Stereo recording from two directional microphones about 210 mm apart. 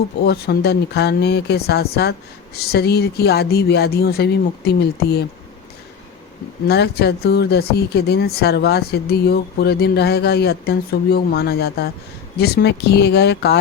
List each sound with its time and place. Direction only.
0.3 s speech: 50° left (ahead or behind)
6.7 s speech: 50° left (ahead or behind)